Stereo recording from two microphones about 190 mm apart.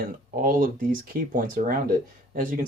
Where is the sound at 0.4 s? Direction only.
45° right (ahead or behind).